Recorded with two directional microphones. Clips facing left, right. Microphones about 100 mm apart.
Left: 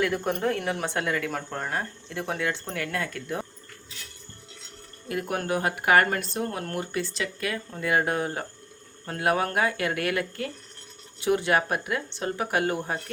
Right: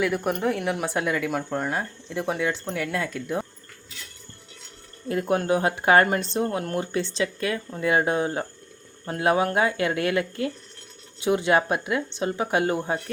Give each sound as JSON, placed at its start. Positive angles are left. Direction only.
{"t": 0.0, "sound": "speech", "side_deg": -10}
{"t": 5.0, "sound": "speech", "side_deg": -25}